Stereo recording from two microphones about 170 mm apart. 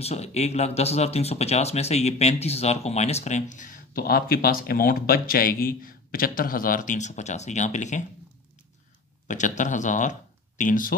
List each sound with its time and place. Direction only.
0.0 s speech: 40° left (ahead or behind)
9.3 s speech: 45° left (ahead or behind)